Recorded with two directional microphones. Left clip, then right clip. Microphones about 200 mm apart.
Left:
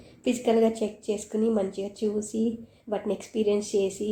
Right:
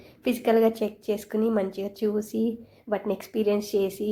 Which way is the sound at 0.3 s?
15° right (ahead or behind).